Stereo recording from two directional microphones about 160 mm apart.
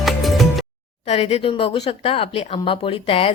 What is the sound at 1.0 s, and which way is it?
A woman's voice, 40° left (ahead or behind).